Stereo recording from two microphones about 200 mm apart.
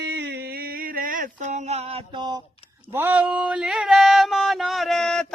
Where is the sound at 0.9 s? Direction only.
45° right (ahead or behind); by 2.4 s 20° right (ahead or behind).